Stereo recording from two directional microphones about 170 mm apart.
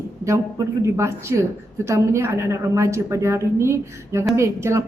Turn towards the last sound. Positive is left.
turn(degrees=-15)  # may be behind; listen again after turning